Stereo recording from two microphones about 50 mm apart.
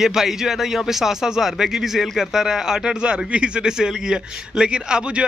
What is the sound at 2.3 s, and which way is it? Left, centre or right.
A man's voice, centre.